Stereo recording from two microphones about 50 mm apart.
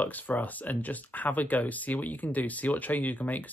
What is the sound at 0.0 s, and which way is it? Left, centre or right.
Speech, left.